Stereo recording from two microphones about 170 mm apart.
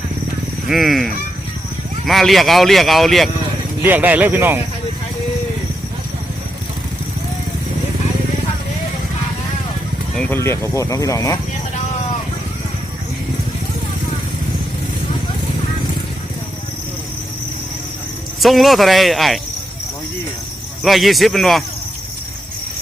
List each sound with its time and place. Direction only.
0.7 s speech: centre (ahead or behind)
3.8 s speech: 10° right (ahead or behind)
10.2 s speech: 10° left (ahead or behind)
18.3 s speech: centre (ahead or behind)
20.8 s speech: centre (ahead or behind)